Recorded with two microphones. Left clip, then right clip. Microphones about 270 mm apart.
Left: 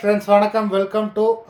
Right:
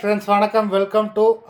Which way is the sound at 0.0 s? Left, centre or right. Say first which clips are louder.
Left 2 dB; centre.